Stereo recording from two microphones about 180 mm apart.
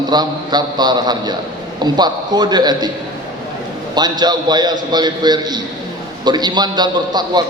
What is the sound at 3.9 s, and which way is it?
A man's voice, 25° right (ahead or behind).